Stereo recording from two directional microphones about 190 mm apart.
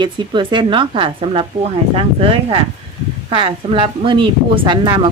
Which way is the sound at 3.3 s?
25° right (ahead or behind).